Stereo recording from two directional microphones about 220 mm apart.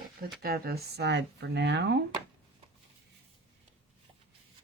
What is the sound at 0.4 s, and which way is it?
Speech, 45° right (ahead or behind).